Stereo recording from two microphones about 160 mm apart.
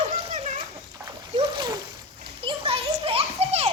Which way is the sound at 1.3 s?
30° right (ahead or behind).